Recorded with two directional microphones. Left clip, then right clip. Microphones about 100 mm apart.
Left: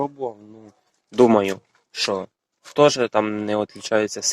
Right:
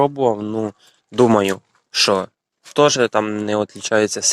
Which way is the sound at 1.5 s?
55° right (ahead or behind).